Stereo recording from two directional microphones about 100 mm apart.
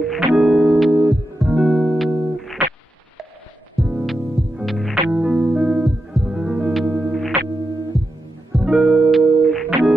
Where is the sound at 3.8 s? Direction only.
Centre (ahead or behind).